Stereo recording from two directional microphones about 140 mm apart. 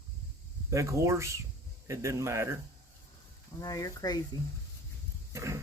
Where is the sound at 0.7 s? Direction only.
20° right (ahead or behind).